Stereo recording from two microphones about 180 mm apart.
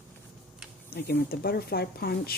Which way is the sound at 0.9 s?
60° left (ahead or behind).